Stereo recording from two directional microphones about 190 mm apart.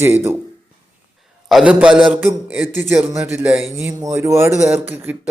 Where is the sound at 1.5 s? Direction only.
5° right (ahead or behind).